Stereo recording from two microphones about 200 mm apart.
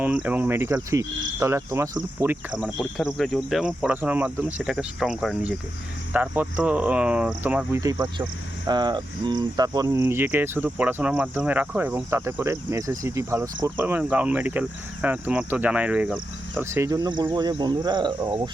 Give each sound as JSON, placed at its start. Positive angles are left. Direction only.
{"t": 0.0, "sound": "speech", "side_deg": -10}
{"t": 2.6, "sound": "cricket", "side_deg": 0}
{"t": 6.1, "sound": "speech", "side_deg": -10}